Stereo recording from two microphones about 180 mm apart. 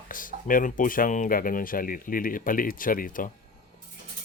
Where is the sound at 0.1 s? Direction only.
50° left (ahead or behind).